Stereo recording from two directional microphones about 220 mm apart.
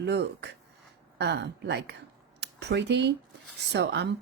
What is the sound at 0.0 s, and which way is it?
Speech, 50° right (ahead or behind).